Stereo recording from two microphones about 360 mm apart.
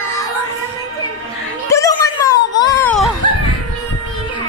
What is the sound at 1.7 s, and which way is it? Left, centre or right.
Music, centre.